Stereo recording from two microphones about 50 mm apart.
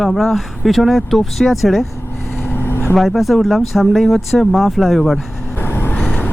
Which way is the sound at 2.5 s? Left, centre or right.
Left.